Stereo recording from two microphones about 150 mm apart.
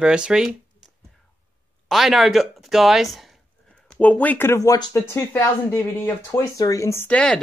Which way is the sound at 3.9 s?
10° left (ahead or behind).